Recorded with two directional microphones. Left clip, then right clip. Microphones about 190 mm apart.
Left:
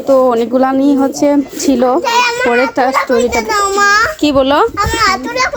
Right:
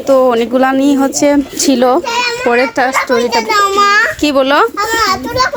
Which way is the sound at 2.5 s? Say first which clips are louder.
Even; 15° left (ahead or behind).